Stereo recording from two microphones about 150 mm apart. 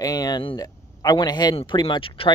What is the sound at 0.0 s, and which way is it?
Speech, 25° left (ahead or behind).